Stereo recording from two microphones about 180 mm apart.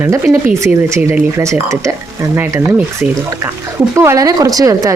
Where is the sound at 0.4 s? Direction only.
10° right (ahead or behind).